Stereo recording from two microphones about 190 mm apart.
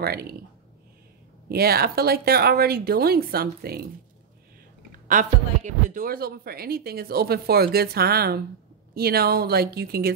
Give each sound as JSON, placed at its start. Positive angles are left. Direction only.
{"t": 0.0, "sound": "speech", "side_deg": -55}
{"t": 1.5, "sound": "speech", "side_deg": -55}
{"t": 5.0, "sound": "speech", "side_deg": -40}